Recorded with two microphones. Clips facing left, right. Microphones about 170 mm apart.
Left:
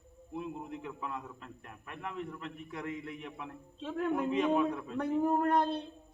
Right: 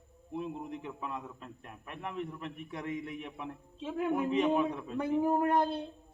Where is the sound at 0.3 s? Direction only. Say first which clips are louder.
Right 2 dB; 25° right (ahead or behind).